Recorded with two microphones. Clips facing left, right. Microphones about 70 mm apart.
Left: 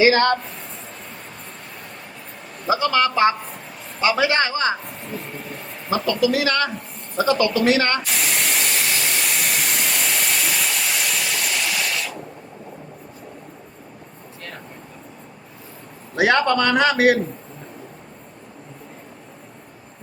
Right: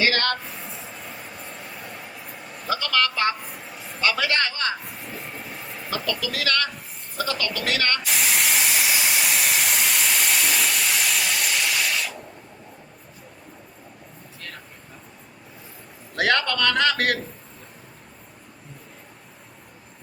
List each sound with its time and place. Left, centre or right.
0.0 s a man's voice: centre
0.4 s a sound: centre
2.6 s a woman's voice: centre
3.4 s a sound: centre
4.0 s a man's voice: centre
4.8 s a sound: centre
6.1 s a woman's voice: centre
8.0 s steam: centre
16.1 s a man's voice: centre